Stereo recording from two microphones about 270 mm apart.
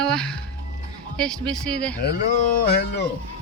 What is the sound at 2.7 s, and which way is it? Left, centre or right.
Speech, left.